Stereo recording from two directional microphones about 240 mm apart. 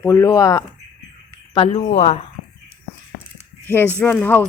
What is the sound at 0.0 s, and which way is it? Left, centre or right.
Speech, centre.